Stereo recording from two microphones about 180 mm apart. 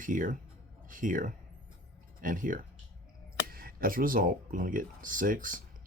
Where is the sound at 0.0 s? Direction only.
45° right (ahead or behind).